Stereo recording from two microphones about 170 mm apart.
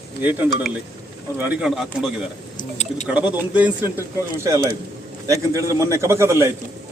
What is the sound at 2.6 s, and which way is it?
Speech, 45° left (ahead or behind).